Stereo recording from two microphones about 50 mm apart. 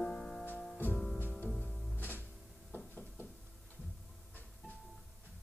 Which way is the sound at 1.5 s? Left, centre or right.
Centre.